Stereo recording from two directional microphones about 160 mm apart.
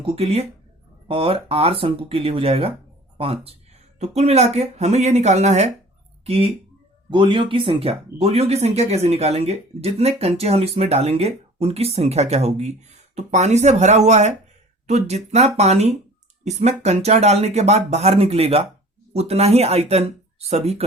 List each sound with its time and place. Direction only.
0.0 s speech: 40° right (ahead or behind)
4.0 s speech: 45° right (ahead or behind)